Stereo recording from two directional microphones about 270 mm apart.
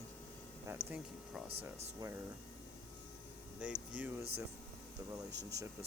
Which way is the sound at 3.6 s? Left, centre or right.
Centre.